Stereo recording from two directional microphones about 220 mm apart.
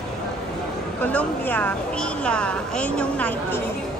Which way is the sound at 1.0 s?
5° left (ahead or behind).